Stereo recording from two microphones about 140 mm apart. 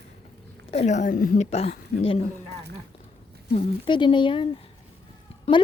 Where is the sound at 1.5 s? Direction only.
45° left (ahead or behind).